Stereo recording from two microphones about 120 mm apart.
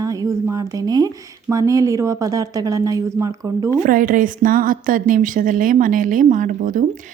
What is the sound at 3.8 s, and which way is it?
Speech, 90° right.